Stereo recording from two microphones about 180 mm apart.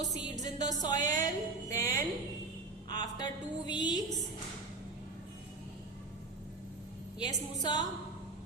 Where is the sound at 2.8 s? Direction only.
20° left (ahead or behind).